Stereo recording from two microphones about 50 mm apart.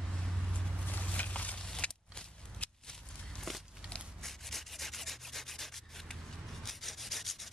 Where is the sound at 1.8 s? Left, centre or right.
Centre.